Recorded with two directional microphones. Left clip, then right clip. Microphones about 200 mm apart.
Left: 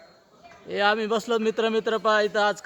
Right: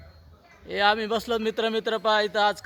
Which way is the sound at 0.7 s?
35° right (ahead or behind).